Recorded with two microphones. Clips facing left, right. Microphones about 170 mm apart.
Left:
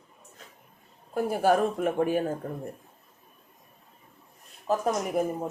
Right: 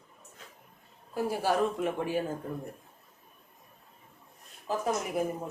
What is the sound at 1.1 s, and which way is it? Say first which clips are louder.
Speech: left 5 dB; 50° left (ahead or behind).